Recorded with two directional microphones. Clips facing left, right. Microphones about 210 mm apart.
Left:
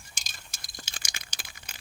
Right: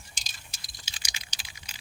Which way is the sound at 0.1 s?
50° left (ahead or behind).